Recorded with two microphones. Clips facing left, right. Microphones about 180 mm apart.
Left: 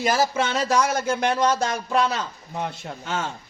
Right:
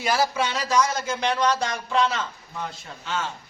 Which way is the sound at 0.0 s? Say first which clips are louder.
Left 2 dB; 50° left (ahead or behind).